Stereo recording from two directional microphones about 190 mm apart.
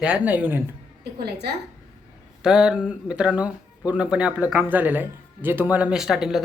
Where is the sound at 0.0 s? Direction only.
5° right (ahead or behind).